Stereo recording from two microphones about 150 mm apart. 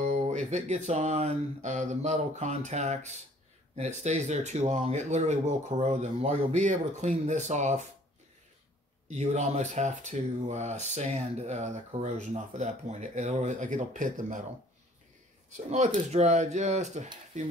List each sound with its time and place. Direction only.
0.0 s speech: 50° right (ahead or behind)
9.1 s speech: 50° right (ahead or behind)
15.5 s speech: 55° right (ahead or behind)